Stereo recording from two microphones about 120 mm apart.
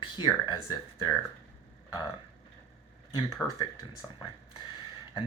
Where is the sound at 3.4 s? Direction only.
5° left (ahead or behind).